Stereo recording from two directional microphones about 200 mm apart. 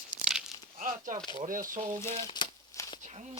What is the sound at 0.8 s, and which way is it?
Speech, 40° right (ahead or behind).